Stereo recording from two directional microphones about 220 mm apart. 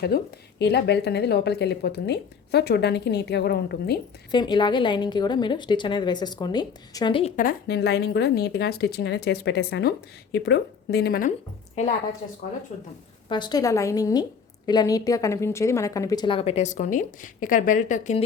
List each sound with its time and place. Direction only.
0.1 s speech: 45° left (ahead or behind)
4.3 s a woman's voice: 20° left (ahead or behind)
13.2 s a woman's voice: 20° left (ahead or behind)